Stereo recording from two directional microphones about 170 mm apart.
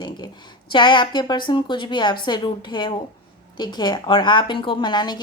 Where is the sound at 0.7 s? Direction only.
30° left (ahead or behind).